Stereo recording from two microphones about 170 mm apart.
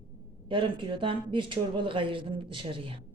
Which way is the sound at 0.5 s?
30° right (ahead or behind).